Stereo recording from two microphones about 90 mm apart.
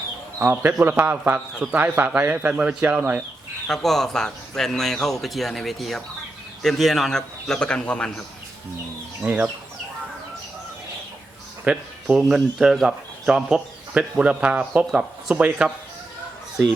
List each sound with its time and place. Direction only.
0.3 s a man's voice: 25° right (ahead or behind)
3.7 s speech: 5° left (ahead or behind)
9.2 s a man's voice: 20° right (ahead or behind)
11.6 s a man's voice: 10° right (ahead or behind)